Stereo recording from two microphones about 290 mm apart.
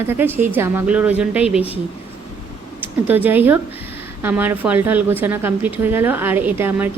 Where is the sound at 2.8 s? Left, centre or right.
Centre.